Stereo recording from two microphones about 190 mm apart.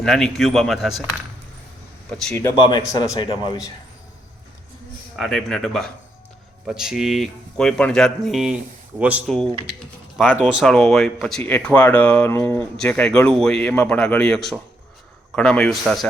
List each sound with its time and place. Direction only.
0.0 s speech: centre (ahead or behind)
2.0 s speech: 5° left (ahead or behind)
3.0 s speech: 25° left (ahead or behind)
5.1 s speech: centre (ahead or behind)